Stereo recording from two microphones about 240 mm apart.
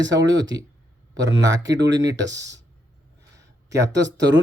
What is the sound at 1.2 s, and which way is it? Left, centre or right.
Speech, centre.